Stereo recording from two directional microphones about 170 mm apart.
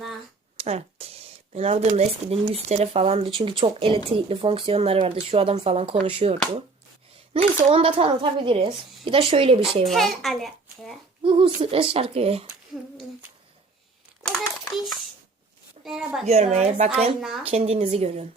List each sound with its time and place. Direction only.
0.5 s a sound: 35° right (ahead or behind)
1.5 s speech: 40° right (ahead or behind)
7.7 s speech: 30° right (ahead or behind)
9.8 s a child's voice: centre (ahead or behind)
11.2 s speech: 30° right (ahead or behind)
14.3 s a sound: centre (ahead or behind)
15.8 s a woman's voice: centre (ahead or behind)
16.2 s speech: 40° right (ahead or behind)
17.2 s a child's voice: centre (ahead or behind)
17.4 s speech: 35° right (ahead or behind)